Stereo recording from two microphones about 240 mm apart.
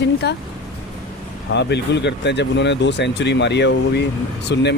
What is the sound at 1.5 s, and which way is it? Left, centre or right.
A woman's voice, left.